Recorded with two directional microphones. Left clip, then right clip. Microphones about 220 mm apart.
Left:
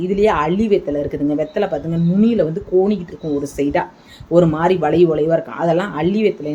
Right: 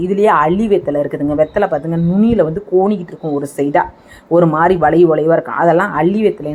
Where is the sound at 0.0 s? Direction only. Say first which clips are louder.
Right 4 dB; 5° right (ahead or behind).